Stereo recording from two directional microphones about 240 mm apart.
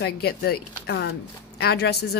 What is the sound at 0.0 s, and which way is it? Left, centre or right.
A woman's voice, left.